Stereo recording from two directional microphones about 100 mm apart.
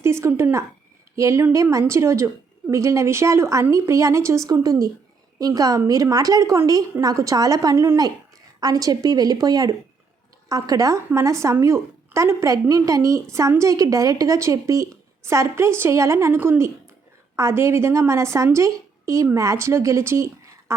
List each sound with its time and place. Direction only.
0.0 s a woman's voice: 25° right (ahead or behind)